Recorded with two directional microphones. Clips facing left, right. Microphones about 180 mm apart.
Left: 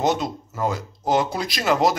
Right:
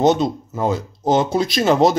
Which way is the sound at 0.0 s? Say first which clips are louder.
Right 6 dB; 20° right (ahead or behind).